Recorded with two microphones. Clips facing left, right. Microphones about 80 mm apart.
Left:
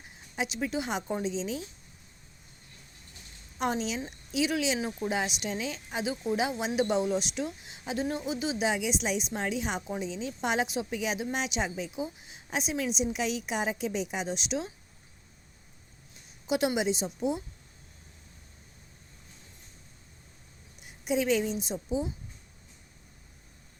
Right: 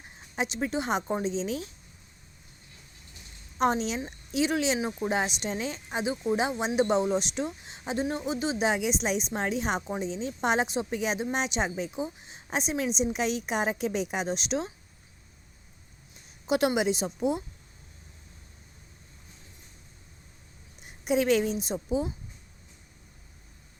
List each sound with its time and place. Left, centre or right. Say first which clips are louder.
0.3 s speech: right 2 dB; right
3.6 s speech: right 4 dB; right
9.8 s speech: right 2 dB; right
16.5 s a woman's voice: right 2 dB; right
20.8 s a woman's voice: right 3 dB; right